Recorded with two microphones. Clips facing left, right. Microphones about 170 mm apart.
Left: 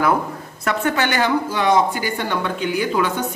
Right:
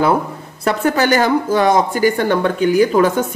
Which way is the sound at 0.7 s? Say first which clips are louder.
Right 5 dB; 35° right (ahead or behind).